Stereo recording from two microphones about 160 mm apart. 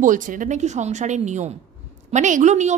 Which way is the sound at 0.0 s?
55° right (ahead or behind).